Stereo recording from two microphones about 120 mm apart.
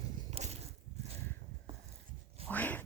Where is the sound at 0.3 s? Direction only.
65° right (ahead or behind).